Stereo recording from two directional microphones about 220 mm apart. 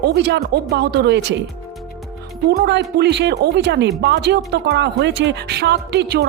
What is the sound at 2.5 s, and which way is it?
Speech, 50° right (ahead or behind).